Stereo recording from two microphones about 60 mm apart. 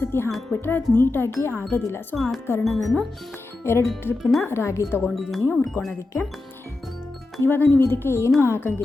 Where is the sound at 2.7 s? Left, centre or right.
Centre.